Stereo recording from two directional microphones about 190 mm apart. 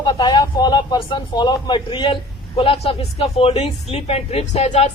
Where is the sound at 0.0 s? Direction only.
20° left (ahead or behind).